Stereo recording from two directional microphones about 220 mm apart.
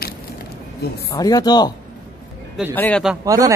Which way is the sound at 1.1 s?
15° left (ahead or behind).